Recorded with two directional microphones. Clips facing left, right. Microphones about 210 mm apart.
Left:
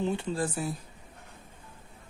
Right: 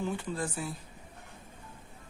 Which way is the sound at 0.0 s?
25° left (ahead or behind).